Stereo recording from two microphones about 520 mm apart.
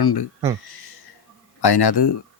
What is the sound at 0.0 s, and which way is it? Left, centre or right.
Speech, left.